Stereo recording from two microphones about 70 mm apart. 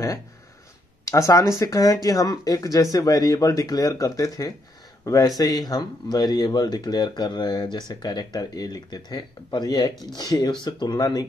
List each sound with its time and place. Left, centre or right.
1.0 s speech: left
10.6 s speech: left